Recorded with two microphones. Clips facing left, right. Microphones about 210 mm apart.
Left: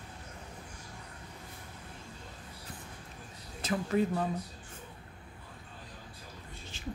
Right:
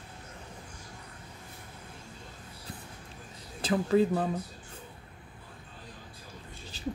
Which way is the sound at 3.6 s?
30° right (ahead or behind).